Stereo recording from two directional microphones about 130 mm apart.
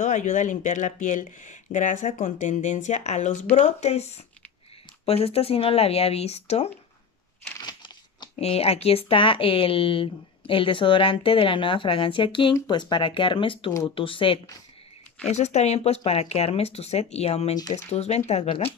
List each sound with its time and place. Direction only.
0.0 s speech: 75° left (ahead or behind)
2.1 s speech: 60° left (ahead or behind)
7.6 s crunch: 35° left (ahead or behind)
8.4 s speech: 50° left (ahead or behind)
15.2 s speech: 60° left (ahead or behind)
17.6 s speech: 30° left (ahead or behind)
17.8 s speech: 55° left (ahead or behind)